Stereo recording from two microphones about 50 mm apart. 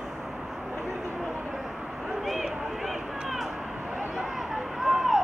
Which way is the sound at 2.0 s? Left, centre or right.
Centre.